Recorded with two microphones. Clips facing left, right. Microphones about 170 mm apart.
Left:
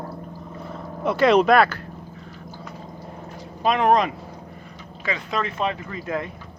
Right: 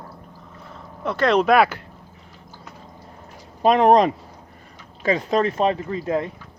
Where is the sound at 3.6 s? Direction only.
40° right (ahead or behind).